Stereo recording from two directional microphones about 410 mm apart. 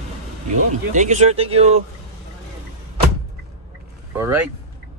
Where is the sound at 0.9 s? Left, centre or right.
Centre.